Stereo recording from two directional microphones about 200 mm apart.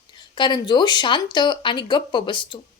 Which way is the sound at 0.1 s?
25° left (ahead or behind).